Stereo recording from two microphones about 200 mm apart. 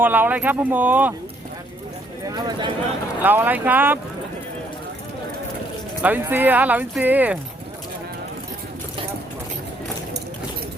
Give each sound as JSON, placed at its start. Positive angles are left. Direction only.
{"t": 0.0, "sound": "speech", "side_deg": -10}
{"t": 2.3, "sound": "speech", "side_deg": -25}
{"t": 3.2, "sound": "speech", "side_deg": -10}
{"t": 6.0, "sound": "speech", "side_deg": -10}